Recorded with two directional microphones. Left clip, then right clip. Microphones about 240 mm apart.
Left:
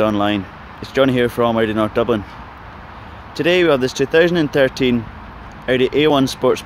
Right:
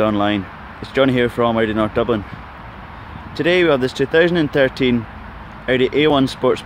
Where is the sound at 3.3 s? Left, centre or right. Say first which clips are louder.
Left 1 dB; centre.